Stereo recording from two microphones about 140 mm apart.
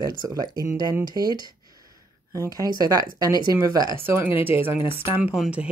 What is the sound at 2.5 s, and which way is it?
Speech, 25° right (ahead or behind).